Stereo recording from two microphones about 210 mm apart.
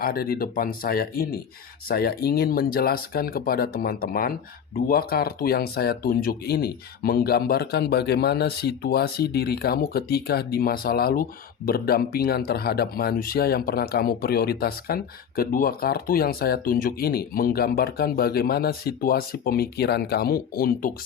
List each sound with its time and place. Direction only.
0.0 s speech: 45° left (ahead or behind)